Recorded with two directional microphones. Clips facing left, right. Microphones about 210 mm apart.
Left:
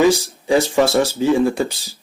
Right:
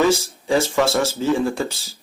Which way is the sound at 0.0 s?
15° left (ahead or behind).